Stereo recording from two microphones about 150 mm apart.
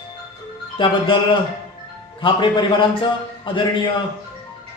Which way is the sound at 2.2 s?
35° left (ahead or behind).